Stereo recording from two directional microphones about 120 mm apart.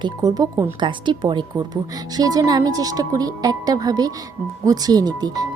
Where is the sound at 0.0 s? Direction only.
30° right (ahead or behind).